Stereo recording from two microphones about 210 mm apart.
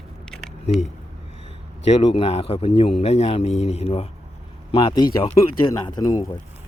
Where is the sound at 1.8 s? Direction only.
30° left (ahead or behind).